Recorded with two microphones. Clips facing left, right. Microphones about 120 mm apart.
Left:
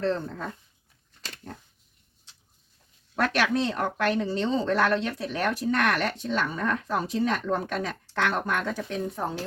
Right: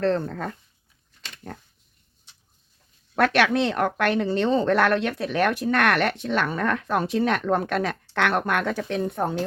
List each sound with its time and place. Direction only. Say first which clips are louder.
0.0 s speech: right 4 dB; 65° right (ahead or behind)
3.2 s speech: right 5 dB; 70° right (ahead or behind)